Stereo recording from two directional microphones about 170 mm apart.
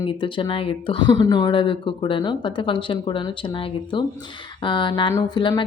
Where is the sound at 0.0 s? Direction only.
30° left (ahead or behind).